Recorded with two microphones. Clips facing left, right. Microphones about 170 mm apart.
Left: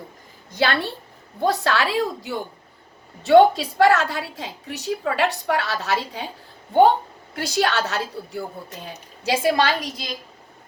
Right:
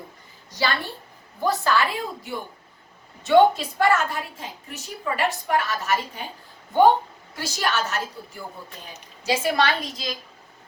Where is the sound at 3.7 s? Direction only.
85° left.